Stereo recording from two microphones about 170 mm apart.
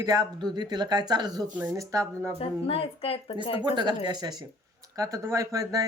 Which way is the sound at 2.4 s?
35° left (ahead or behind).